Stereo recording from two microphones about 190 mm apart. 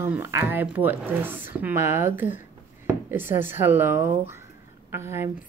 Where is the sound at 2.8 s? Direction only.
10° right (ahead or behind).